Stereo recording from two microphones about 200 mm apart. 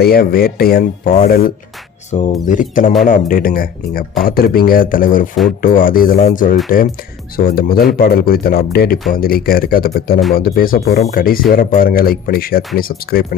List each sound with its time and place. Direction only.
0.0 s speech: 50° left (ahead or behind)